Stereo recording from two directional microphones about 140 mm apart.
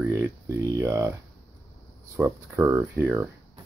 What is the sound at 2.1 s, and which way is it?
Speech, 20° right (ahead or behind).